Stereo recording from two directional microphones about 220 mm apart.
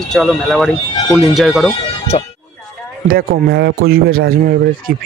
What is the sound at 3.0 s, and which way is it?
Speech, 45° right (ahead or behind).